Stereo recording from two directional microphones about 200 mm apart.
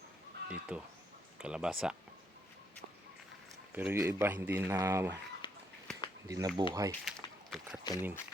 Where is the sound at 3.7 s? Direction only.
10° right (ahead or behind).